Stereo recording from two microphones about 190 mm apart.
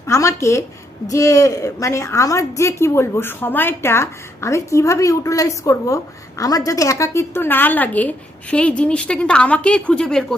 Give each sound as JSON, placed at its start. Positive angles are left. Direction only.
{"t": 0.1, "sound": "a woman's voice", "side_deg": 15}